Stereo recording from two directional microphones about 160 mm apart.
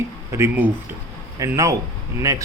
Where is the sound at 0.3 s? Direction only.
15° right (ahead or behind).